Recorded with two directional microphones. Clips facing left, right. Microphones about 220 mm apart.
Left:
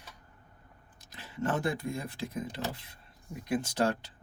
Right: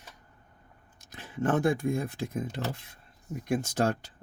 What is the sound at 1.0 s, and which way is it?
Speech, 50° right (ahead or behind).